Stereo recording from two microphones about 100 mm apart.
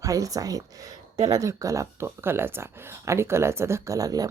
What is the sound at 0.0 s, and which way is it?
Speech, 35° right (ahead or behind).